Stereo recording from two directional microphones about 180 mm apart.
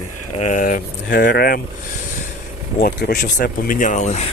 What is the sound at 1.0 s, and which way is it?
Speech, 60° left (ahead or behind).